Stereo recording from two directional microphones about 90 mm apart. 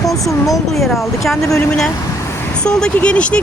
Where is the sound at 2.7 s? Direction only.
10° left (ahead or behind).